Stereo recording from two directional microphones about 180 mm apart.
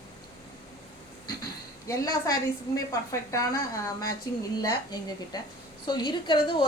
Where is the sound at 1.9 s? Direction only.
20° left (ahead or behind).